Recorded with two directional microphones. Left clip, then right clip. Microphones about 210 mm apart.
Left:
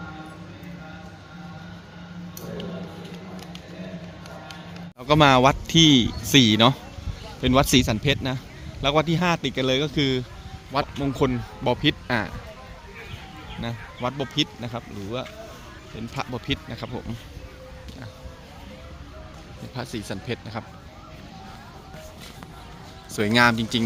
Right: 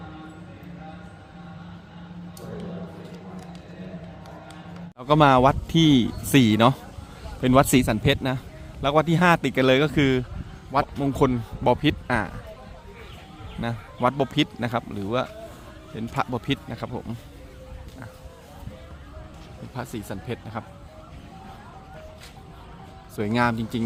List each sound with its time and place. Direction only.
4.9 s a man's voice: 5° right (ahead or behind)
13.6 s a man's voice: 20° right (ahead or behind)
19.7 s speech: 5° right (ahead or behind)
23.1 s speech: centre (ahead or behind)